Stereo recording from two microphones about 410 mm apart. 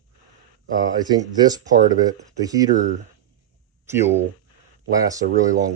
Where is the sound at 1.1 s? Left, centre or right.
Centre.